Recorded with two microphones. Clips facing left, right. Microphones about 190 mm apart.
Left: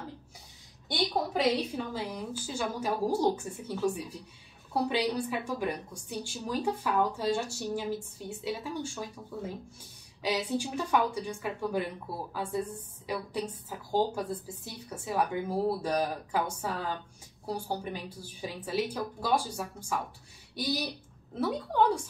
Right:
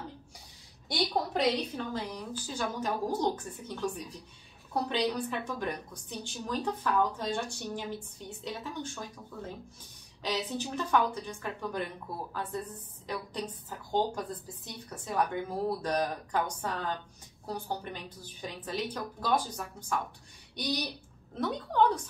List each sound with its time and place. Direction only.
0.8 s a woman's voice: centre (ahead or behind)